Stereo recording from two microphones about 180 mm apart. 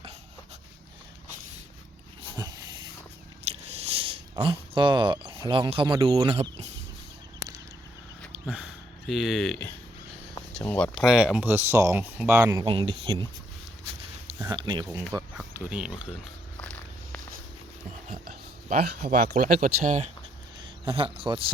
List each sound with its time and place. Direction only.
3.4 s biting: 35° right (ahead or behind)
4.4 s speech: 30° right (ahead or behind)
8.3 s a sound: 5° right (ahead or behind)
10.6 s speech: 10° left (ahead or behind); by 12.6 s 15° right (ahead or behind)
12.6 s speech: 30° right (ahead or behind)
14.5 s speech: 25° right (ahead or behind)
15.5 s speech: 5° right (ahead or behind)
16.6 s walk: 5° left (ahead or behind)
18.1 s a sound: 55° right (ahead or behind)
19.3 s speech: 45° right (ahead or behind)
20.6 s a man's voice: 30° right (ahead or behind)